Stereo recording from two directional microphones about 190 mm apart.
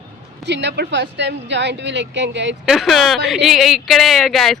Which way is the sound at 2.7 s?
Centre (ahead or behind).